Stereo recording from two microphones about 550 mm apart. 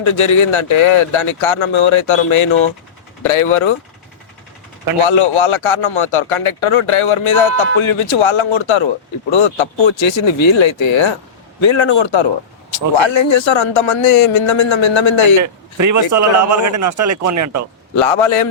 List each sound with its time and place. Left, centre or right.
0.0 s a man's voice: left
4.9 s a man's voice: left
15.4 s a man's voice: right
17.9 s a man's voice: left